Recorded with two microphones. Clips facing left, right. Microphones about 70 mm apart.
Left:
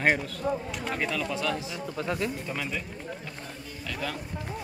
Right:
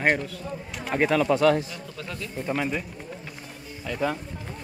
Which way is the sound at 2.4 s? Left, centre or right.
Right.